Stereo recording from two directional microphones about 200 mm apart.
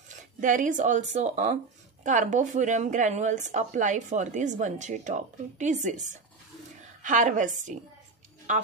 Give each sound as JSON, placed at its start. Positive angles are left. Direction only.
{"t": 0.1, "sound": "speech", "side_deg": -40}
{"t": 7.0, "sound": "speech", "side_deg": -40}